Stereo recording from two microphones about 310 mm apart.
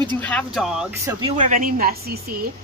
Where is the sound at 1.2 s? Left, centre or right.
Right.